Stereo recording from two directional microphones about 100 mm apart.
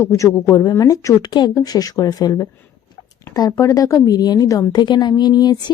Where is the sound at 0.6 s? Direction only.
40° left (ahead or behind).